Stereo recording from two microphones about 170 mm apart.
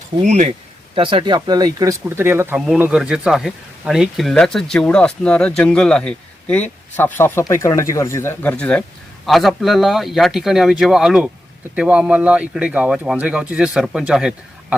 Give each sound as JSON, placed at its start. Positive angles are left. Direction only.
{"t": 0.2, "sound": "speech", "side_deg": -45}
{"t": 0.9, "sound": "speech", "side_deg": -30}